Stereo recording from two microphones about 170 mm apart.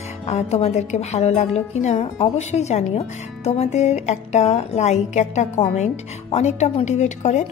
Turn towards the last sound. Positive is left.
turn(degrees=45)  # may be behind; listen again after turning